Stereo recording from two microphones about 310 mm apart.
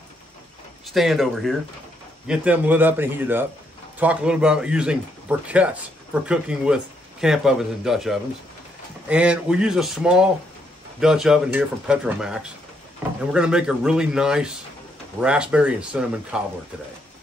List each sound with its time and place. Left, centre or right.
0.9 s speech: centre